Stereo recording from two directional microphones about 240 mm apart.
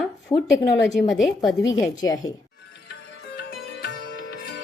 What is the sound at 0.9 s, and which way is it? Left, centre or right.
Speech, centre.